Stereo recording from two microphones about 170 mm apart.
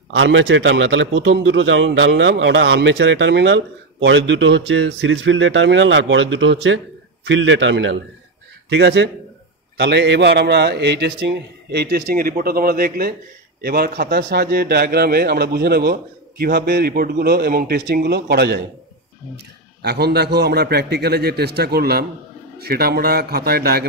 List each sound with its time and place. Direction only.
0.1 s a man's voice: 90° right; by 23.9 s 65° right (ahead or behind)